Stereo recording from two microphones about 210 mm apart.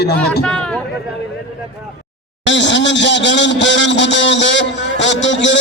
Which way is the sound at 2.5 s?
60° left (ahead or behind).